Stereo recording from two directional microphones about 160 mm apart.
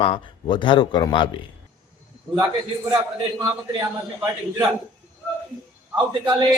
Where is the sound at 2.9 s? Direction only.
25° right (ahead or behind).